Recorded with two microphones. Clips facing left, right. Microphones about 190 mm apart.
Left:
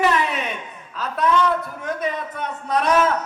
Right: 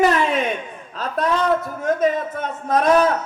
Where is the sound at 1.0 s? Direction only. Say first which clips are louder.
Even; 40° right (ahead or behind).